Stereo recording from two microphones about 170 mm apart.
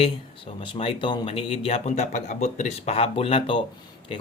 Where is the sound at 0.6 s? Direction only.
30° left (ahead or behind).